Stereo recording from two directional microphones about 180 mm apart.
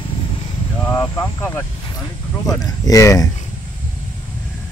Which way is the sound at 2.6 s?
20° left (ahead or behind).